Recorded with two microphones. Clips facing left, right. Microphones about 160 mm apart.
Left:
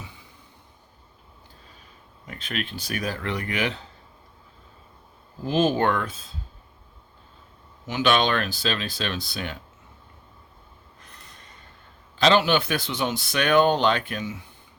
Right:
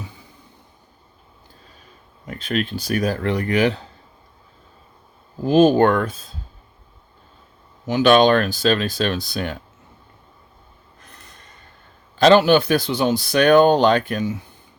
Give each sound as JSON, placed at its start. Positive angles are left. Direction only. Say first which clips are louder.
{"t": 2.2, "sound": "speech", "louder": "right 8 dB", "side_deg": -40}
{"t": 5.5, "sound": "speech", "louder": "right 8 dB", "side_deg": -45}
{"t": 7.9, "sound": "speech", "louder": "right 8 dB", "side_deg": -40}
{"t": 12.1, "sound": "speech", "louder": "right 7 dB", "side_deg": -45}